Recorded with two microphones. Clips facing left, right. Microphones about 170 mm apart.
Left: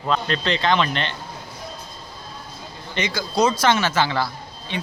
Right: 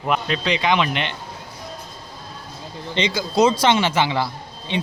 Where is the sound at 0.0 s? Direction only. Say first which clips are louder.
Right 1 dB; 15° right (ahead or behind).